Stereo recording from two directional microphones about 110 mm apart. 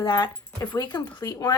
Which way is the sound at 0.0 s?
40° left (ahead or behind).